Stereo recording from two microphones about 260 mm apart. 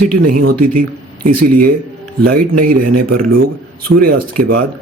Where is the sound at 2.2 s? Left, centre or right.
Right.